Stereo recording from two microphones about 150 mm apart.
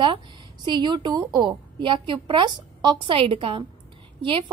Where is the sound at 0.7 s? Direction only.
30° right (ahead or behind).